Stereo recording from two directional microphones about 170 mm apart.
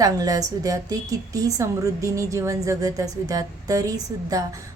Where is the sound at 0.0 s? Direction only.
20° right (ahead or behind).